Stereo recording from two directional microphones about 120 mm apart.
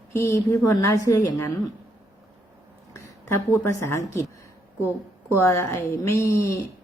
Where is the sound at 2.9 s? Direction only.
20° left (ahead or behind).